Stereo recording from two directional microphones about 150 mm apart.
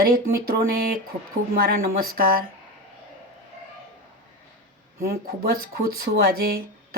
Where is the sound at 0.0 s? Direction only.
80° right.